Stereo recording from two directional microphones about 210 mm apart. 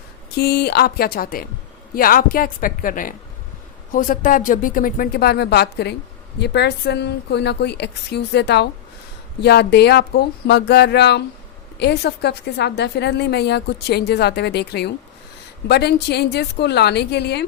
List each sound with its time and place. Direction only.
0.3 s a woman's voice: 50° left (ahead or behind)